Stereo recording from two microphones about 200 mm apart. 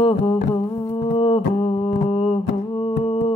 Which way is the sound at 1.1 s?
25° left (ahead or behind).